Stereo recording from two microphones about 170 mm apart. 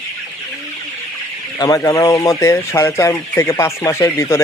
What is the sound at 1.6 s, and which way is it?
Speech, 20° left (ahead or behind).